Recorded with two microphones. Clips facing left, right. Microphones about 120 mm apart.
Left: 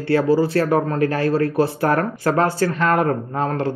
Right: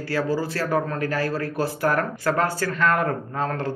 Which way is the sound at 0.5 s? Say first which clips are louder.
Left 6 dB; 30° left (ahead or behind).